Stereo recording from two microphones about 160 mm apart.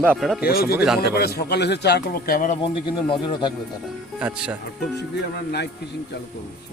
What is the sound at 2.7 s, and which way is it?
Speech, 30° left (ahead or behind).